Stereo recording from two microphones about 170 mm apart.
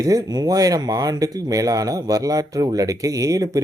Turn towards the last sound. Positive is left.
turn(degrees=-20)  # may be behind; listen again after turning